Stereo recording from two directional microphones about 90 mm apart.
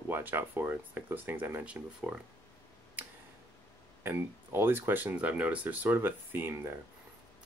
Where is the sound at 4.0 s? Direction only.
25° right (ahead or behind).